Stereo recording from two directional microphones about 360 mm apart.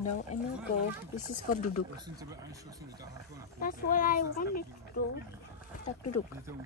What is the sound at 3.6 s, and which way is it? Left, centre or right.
Speech, left.